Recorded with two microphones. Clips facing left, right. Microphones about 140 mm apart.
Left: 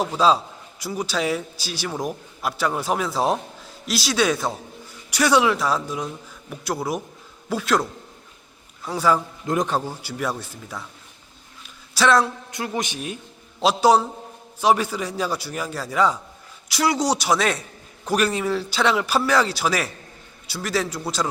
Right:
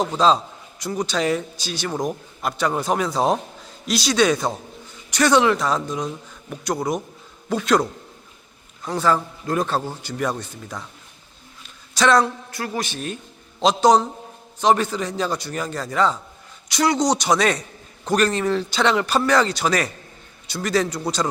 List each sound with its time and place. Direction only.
0.0 s a man's voice: 5° left (ahead or behind)
11.9 s a man's voice: centre (ahead or behind)
12.5 s a man's voice: 20° left (ahead or behind); by 21.0 s 5° left (ahead or behind)